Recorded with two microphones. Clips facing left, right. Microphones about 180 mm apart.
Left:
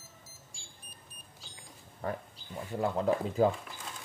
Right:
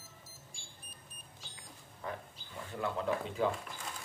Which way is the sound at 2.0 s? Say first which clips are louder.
Left 6 dB; 40° left (ahead or behind).